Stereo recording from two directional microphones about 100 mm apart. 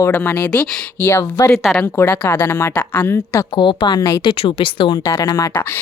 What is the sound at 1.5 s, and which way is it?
Speech, 5° left (ahead or behind).